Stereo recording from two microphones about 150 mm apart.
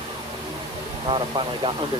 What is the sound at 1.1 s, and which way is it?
Speech, 35° right (ahead or behind).